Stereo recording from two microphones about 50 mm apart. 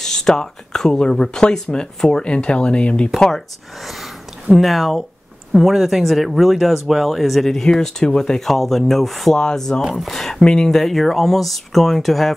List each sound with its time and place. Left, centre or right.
0.0 s speech: centre
3.2 s speech: centre